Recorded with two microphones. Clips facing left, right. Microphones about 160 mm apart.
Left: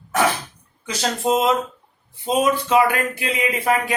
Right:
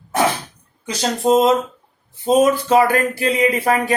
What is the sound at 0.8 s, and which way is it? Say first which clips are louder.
Speech: right 4 dB; 35° right (ahead or behind).